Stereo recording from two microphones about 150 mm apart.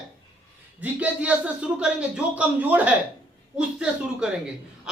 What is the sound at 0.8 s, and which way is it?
A man's voice, 10° right (ahead or behind).